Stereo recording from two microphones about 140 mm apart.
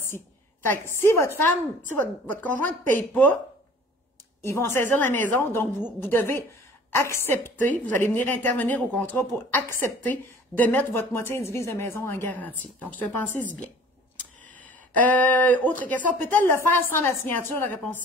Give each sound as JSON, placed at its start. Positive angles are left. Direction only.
{"t": 0.0, "sound": "a woman's voice", "side_deg": 15}
{"t": 4.4, "sound": "a woman's voice", "side_deg": 20}
{"t": 15.0, "sound": "a woman's voice", "side_deg": 10}